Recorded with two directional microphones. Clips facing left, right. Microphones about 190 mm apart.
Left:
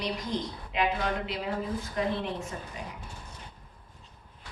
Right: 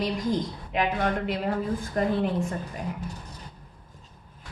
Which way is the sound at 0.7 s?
50° right (ahead or behind).